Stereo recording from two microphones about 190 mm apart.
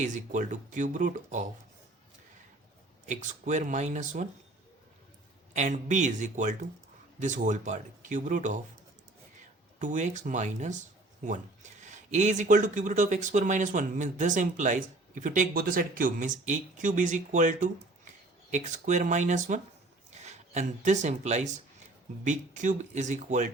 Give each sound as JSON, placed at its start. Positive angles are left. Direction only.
{"t": 0.0, "sound": "speech", "side_deg": -40}
{"t": 3.1, "sound": "speech", "side_deg": -40}
{"t": 5.5, "sound": "speech", "side_deg": -40}
{"t": 9.7, "sound": "speech", "side_deg": -40}